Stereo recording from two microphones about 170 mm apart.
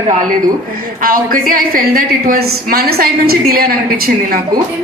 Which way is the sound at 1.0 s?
55° right (ahead or behind).